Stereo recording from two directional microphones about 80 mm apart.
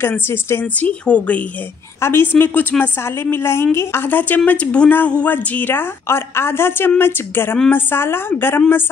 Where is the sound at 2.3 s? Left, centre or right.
Left.